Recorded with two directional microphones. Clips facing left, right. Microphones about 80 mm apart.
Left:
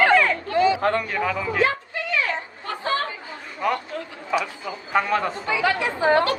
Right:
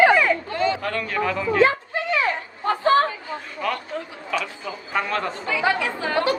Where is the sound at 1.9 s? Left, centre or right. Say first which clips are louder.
Right 2 dB; right.